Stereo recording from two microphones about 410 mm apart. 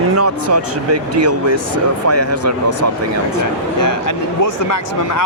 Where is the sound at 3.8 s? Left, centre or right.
Left.